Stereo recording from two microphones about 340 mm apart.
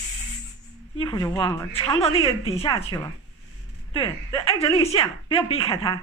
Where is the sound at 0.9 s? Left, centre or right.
Centre.